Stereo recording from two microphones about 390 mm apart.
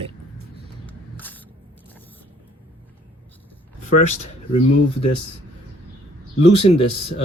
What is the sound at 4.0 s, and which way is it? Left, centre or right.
Speech, centre.